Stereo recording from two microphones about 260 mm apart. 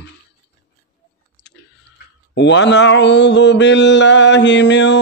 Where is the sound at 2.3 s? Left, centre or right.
Left.